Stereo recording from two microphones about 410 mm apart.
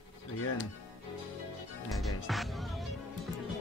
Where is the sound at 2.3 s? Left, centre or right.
Centre.